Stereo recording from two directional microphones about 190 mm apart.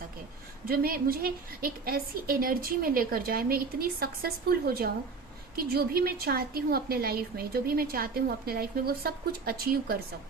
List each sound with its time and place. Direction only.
0.7 s a woman's voice: 50° right (ahead or behind)